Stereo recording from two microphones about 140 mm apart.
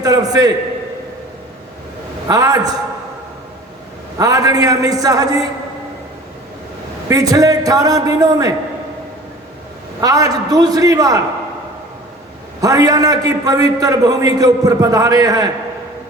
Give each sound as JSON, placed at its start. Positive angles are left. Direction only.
{"t": 0.0, "sound": "a sound", "side_deg": -25}
{"t": 2.2, "sound": "a man's voice", "side_deg": -25}
{"t": 4.2, "sound": "a man's voice", "side_deg": -25}
{"t": 7.1, "sound": "a man's voice", "side_deg": -25}
{"t": 10.0, "sound": "a man's voice", "side_deg": -25}
{"t": 12.6, "sound": "a man's voice", "side_deg": -25}